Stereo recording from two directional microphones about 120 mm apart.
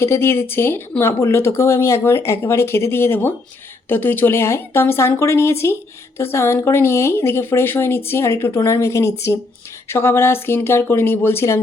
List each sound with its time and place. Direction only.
0.0 s speech: 20° left (ahead or behind)